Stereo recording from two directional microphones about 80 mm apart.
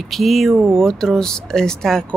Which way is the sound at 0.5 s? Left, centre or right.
Right.